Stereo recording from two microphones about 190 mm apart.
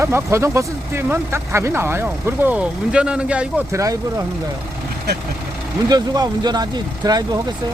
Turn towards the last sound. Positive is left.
turn(degrees=-20)  # may be behind; listen again after turning